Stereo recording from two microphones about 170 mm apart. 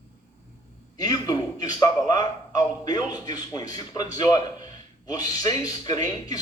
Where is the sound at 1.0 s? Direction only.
20° left (ahead or behind).